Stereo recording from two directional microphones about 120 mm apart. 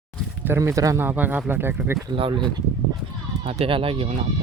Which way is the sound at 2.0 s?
45° right (ahead or behind).